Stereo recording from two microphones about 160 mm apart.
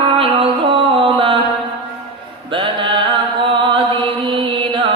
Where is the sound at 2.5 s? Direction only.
30° right (ahead or behind).